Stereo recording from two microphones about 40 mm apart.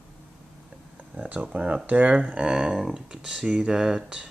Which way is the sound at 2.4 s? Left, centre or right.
Centre.